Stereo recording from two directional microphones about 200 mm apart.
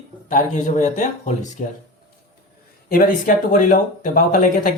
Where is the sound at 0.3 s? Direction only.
40° left (ahead or behind).